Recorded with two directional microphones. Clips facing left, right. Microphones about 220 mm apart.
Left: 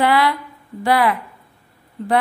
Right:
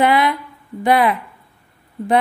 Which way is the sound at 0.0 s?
20° right (ahead or behind).